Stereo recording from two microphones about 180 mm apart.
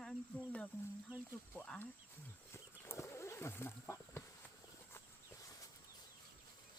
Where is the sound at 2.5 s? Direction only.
15° left (ahead or behind).